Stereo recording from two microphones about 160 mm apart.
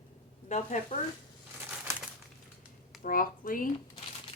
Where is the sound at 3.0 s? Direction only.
60° left (ahead or behind).